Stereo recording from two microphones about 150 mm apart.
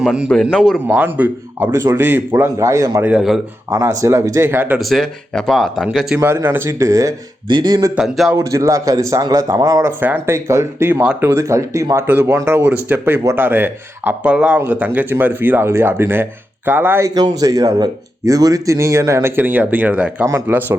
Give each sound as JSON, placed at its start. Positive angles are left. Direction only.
{"t": 0.0, "sound": "speech", "side_deg": -5}
{"t": 0.9, "sound": "speech", "side_deg": -10}
{"t": 3.1, "sound": "speech", "side_deg": -5}
{"t": 3.7, "sound": "speech", "side_deg": -20}
{"t": 4.8, "sound": "speech", "side_deg": 0}
{"t": 6.1, "sound": "speech", "side_deg": -15}
{"t": 7.9, "sound": "speech", "side_deg": 0}
{"t": 8.4, "sound": "speech", "side_deg": -20}
{"t": 17.2, "sound": "speech", "side_deg": -25}